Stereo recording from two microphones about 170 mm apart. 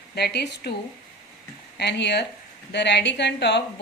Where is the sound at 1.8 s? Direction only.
85° left.